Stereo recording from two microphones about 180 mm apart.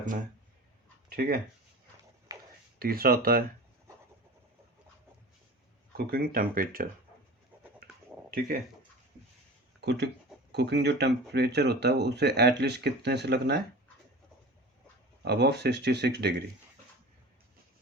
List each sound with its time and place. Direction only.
2.7 s speech: 55° right (ahead or behind)
6.0 s speech: 55° right (ahead or behind)
8.3 s speech: 55° right (ahead or behind)
9.8 s speech: 70° right (ahead or behind)
15.2 s speech: 65° right (ahead or behind)